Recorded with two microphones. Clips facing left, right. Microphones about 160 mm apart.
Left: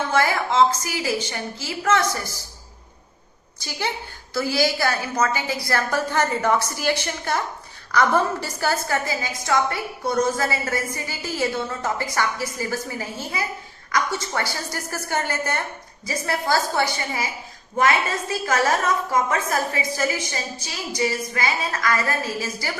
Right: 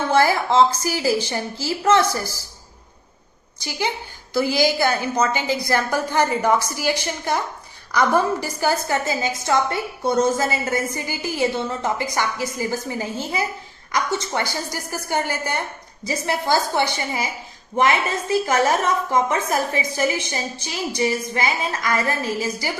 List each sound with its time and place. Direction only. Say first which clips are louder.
0.1 s a woman's voice: right 5 dB; 35° right (ahead or behind)
4.4 s a woman's voice: right 3 dB; 15° right (ahead or behind)